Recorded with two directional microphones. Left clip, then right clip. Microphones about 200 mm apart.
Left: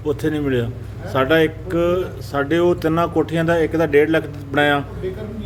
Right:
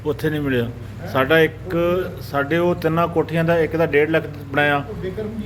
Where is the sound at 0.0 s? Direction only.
5° left (ahead or behind).